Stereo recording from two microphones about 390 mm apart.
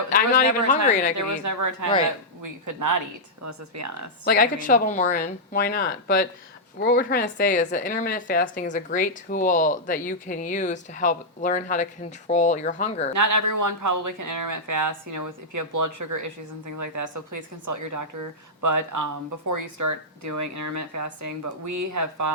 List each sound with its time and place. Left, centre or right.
0.1 s speech: left
1.5 s speech: right
4.3 s speech: left
13.1 s speech: right